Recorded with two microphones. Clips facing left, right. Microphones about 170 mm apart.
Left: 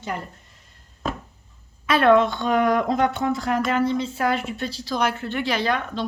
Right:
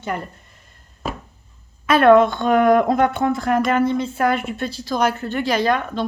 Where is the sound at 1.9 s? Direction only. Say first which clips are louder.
Right 4 dB; 50° right (ahead or behind).